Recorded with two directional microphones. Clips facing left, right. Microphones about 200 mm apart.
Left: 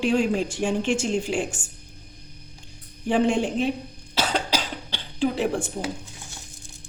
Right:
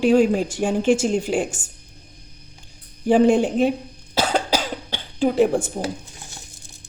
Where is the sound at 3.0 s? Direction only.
40° right (ahead or behind).